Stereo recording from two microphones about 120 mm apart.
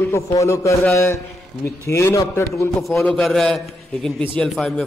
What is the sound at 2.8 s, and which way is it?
A woman's voice, centre (ahead or behind).